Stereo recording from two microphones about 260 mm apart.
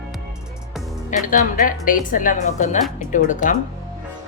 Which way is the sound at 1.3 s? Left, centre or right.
Left.